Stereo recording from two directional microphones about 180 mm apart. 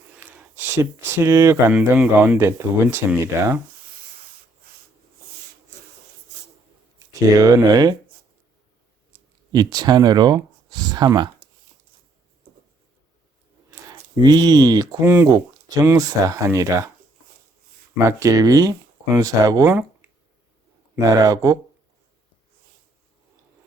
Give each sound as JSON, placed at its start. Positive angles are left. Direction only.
{"t": 0.5, "sound": "speech", "side_deg": -15}
{"t": 7.3, "sound": "speech", "side_deg": -20}
{"t": 9.5, "sound": "speech", "side_deg": -20}
{"t": 12.4, "sound": "writing", "side_deg": -55}
{"t": 14.2, "sound": "speech", "side_deg": -20}
{"t": 17.9, "sound": "speech", "side_deg": -15}
{"t": 21.0, "sound": "speech", "side_deg": -20}